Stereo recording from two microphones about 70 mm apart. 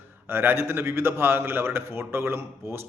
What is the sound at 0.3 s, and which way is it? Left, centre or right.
A man's voice, right.